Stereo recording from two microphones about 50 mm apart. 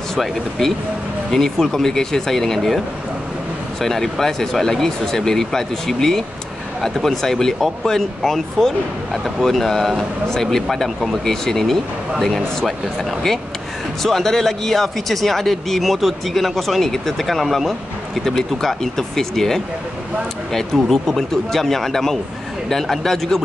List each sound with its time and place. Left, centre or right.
0.1 s speech: centre
3.8 s speech: centre
14.0 s speech: centre
20.7 s speech: centre